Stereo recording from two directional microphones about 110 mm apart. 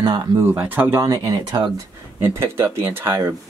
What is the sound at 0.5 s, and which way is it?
Speech, 20° right (ahead or behind).